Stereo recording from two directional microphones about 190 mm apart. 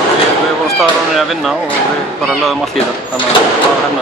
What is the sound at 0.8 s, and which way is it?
Speech, centre (ahead or behind).